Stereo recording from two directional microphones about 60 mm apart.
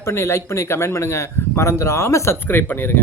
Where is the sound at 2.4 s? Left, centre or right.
Left.